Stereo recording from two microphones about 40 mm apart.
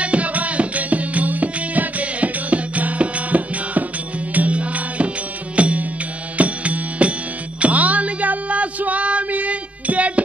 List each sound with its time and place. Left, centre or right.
0.0 s music: right